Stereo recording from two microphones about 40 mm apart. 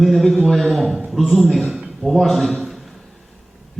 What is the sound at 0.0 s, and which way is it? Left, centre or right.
Speech, centre.